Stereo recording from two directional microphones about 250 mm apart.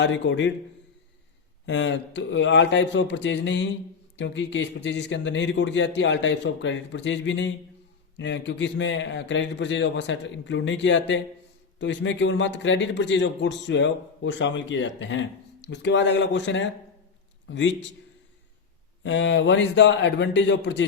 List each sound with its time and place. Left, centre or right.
0.0 s a man's voice: left
1.6 s a man's voice: left
19.0 s a man's voice: left